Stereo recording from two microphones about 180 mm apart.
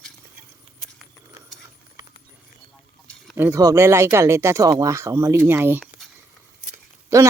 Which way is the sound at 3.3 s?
15° right (ahead or behind).